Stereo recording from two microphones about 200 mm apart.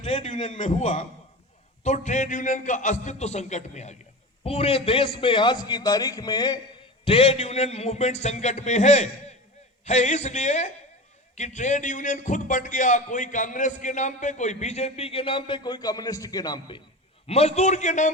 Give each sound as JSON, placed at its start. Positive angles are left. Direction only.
{"t": 0.0, "sound": "a man's voice", "side_deg": 35}
{"t": 17.2, "sound": "a man's voice", "side_deg": 30}